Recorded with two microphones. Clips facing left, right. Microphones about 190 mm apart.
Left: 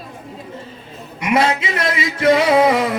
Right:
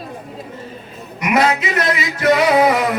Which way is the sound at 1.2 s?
30° left (ahead or behind).